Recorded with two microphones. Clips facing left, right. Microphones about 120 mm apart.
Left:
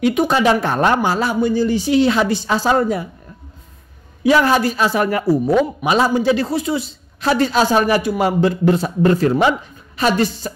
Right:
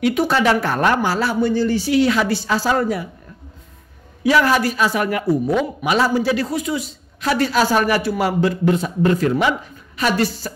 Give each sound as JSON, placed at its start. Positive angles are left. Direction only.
{"t": 0.0, "sound": "a man's voice", "side_deg": 20}
{"t": 4.2, "sound": "speech", "side_deg": 25}
{"t": 5.8, "sound": "a man's voice", "side_deg": 20}